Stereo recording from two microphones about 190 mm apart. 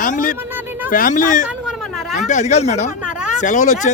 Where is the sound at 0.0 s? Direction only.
45° left (ahead or behind).